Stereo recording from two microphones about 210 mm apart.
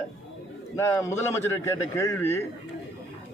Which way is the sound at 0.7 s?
15° left (ahead or behind).